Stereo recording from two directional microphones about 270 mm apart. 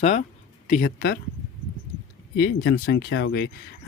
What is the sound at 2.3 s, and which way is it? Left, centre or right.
Speech, left.